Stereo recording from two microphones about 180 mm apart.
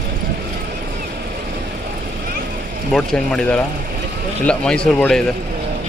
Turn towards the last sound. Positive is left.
turn(degrees=5)  # may be behind; listen again after turning